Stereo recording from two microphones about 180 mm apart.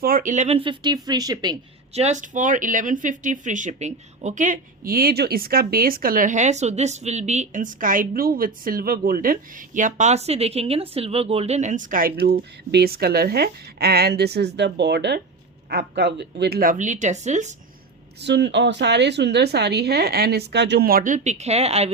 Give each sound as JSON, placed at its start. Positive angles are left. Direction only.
{"t": 0.0, "sound": "speech", "side_deg": -50}
{"t": 1.9, "sound": "speech", "side_deg": -40}
{"t": 12.2, "sound": "a woman's voice", "side_deg": -60}
{"t": 18.2, "sound": "a woman's voice", "side_deg": -70}